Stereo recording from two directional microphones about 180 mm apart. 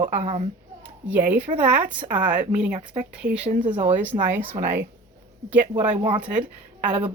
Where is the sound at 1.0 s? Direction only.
10° right (ahead or behind).